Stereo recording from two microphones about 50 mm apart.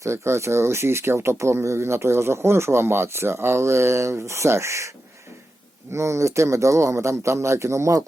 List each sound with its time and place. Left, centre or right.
0.0 s speech: right
5.9 s speech: right